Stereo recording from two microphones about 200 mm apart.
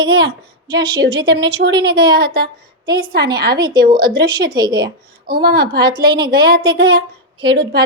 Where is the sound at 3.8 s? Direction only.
45° right (ahead or behind).